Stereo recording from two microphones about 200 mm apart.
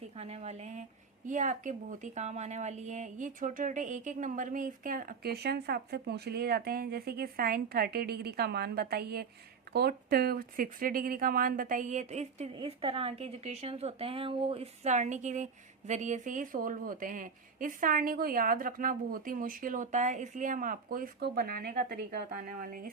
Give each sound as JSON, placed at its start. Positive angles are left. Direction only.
{"t": 0.2, "sound": "a woman's voice", "side_deg": -30}